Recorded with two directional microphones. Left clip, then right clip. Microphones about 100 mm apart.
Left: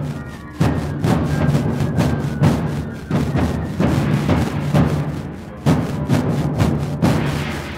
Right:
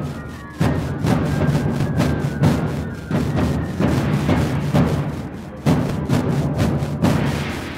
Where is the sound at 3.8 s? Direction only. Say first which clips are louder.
Left 1 dB; 15° left (ahead or behind).